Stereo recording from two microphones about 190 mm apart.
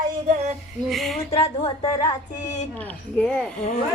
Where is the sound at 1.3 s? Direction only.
30° left (ahead or behind).